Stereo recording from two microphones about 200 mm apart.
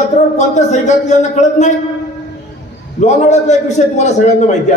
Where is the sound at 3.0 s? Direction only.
35° left (ahead or behind).